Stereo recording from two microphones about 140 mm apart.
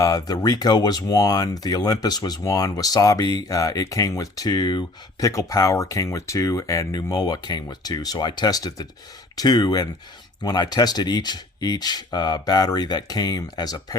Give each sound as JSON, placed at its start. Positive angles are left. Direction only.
{"t": 0.0, "sound": "speech", "side_deg": 25}